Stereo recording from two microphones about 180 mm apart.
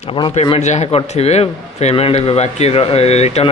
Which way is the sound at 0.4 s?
40° left (ahead or behind).